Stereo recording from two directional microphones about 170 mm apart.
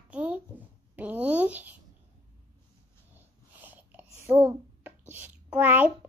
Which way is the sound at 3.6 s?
10° right (ahead or behind).